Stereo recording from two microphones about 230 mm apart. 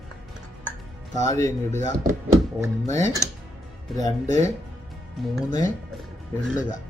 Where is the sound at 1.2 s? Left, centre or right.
Centre.